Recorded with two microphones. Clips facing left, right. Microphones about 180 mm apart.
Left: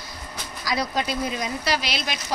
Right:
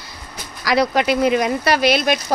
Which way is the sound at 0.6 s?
75° right (ahead or behind).